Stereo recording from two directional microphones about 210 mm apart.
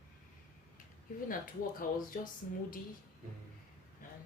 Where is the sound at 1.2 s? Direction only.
40° left (ahead or behind).